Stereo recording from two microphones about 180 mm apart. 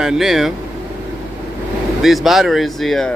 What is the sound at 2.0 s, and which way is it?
Speech, centre (ahead or behind).